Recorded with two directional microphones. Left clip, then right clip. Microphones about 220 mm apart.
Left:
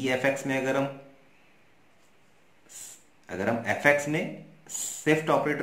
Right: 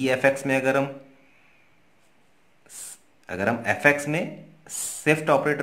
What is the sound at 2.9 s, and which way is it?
A man's voice, 45° right (ahead or behind).